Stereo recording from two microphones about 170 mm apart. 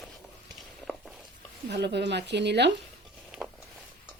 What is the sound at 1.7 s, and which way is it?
Speech, 80° right.